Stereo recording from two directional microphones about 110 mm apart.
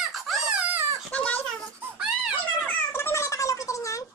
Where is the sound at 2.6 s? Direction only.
20° left (ahead or behind).